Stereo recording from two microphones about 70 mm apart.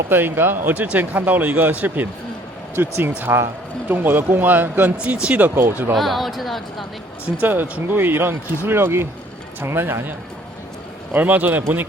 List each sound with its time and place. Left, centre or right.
0.1 s speech: right
4.9 s speech: centre
5.9 s speech: centre
7.4 s speech: right